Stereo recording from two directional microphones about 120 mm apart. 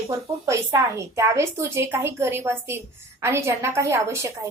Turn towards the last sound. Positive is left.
turn(degrees=-25)  # may be behind; listen again after turning